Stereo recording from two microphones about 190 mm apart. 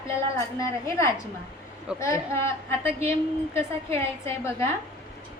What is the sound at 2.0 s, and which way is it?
A woman's voice, 15° left (ahead or behind).